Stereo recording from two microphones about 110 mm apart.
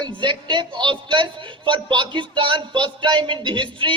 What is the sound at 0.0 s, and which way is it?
Speech, 45° right (ahead or behind).